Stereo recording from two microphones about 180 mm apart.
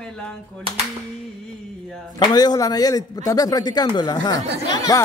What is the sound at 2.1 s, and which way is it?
A man's voice, 20° left (ahead or behind).